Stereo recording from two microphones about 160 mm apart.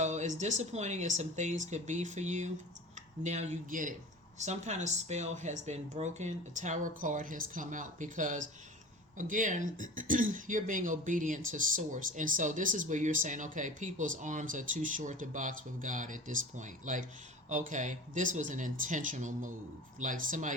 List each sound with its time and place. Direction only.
0.0 s speech: 45° right (ahead or behind)